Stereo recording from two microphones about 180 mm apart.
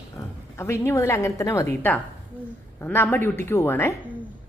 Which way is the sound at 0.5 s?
15° left (ahead or behind).